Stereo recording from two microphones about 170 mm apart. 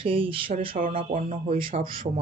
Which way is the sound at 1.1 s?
45° right (ahead or behind).